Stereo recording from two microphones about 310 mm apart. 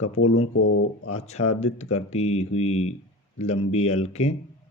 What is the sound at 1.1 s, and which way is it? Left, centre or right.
Speech, left.